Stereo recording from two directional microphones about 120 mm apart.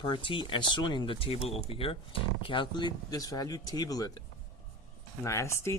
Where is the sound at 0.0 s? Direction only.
45° left (ahead or behind).